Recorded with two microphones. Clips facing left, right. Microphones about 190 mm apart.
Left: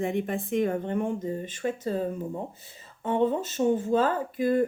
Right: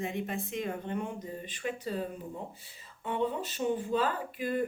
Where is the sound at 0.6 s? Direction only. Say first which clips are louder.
Left 9 dB; 50° left (ahead or behind).